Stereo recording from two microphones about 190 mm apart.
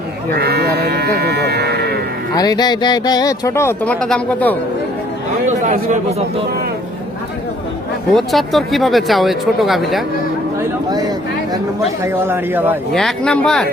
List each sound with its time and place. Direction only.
0.3 s sheep: 60° right (ahead or behind)
2.3 s speech: 20° left (ahead or behind)
5.5 s speech: 40° right (ahead or behind)
8.1 s speech: centre (ahead or behind)
12.0 s a man's voice: 10° right (ahead or behind)
12.9 s speech: centre (ahead or behind)